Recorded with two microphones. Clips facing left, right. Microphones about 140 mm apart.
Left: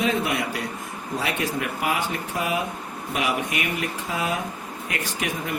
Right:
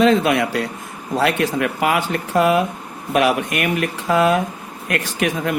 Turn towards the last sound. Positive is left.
turn(degrees=-75)  # may be behind; listen again after turning